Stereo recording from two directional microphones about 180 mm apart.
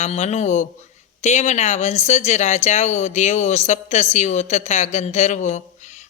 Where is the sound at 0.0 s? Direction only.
40° left (ahead or behind).